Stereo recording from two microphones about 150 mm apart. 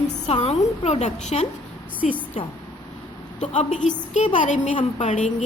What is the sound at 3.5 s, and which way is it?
Speech, 50° left (ahead or behind).